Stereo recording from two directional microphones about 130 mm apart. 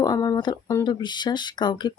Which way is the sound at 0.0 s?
25° left (ahead or behind).